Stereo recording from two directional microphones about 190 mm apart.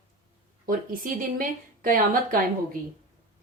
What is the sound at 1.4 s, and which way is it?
A woman's voice, 45° right (ahead or behind).